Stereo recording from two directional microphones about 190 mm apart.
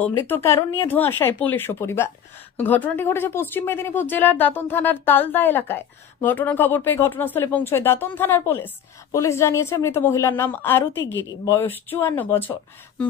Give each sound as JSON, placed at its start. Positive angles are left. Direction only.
{"t": 0.0, "sound": "speech", "side_deg": 10}
{"t": 11.0, "sound": "a woman's voice", "side_deg": 70}
{"t": 11.2, "sound": "speech", "side_deg": 15}